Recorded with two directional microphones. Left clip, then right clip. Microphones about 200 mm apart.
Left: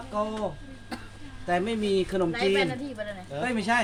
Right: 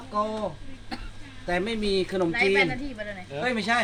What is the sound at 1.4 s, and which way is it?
Speech, 15° right (ahead or behind).